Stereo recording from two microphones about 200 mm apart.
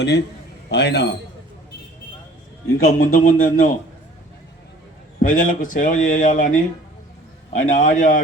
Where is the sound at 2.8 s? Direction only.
45° left (ahead or behind).